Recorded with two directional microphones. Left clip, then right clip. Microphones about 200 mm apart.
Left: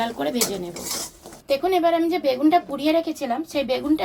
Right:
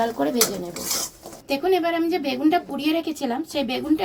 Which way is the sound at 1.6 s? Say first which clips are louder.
Left 1 dB; 20° left (ahead or behind).